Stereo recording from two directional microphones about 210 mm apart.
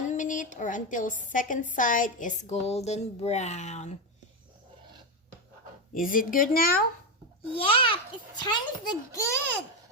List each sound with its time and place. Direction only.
0.1 s a woman's voice: 35° left (ahead or behind)
5.9 s a woman's voice: 40° left (ahead or behind)
7.5 s a child's voice: 25° left (ahead or behind)